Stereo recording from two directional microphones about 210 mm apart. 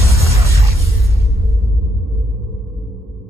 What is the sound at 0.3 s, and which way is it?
Music, 15° right (ahead or behind).